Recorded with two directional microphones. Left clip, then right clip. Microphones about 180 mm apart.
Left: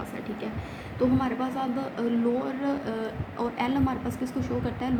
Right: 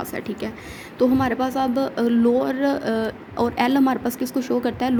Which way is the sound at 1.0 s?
50° right (ahead or behind).